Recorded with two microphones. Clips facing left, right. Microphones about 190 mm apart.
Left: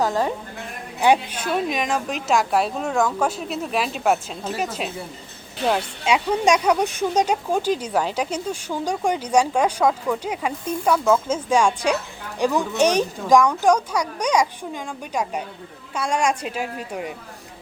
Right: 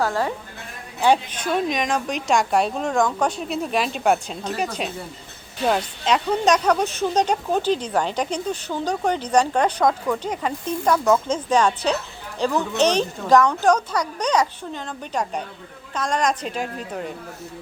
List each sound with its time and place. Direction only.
0.0 s a woman's voice: 15° left (ahead or behind)